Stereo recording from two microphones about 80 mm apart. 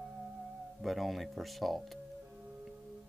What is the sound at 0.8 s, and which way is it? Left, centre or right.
Speech, centre.